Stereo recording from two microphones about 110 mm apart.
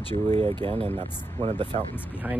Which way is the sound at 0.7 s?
65° right (ahead or behind).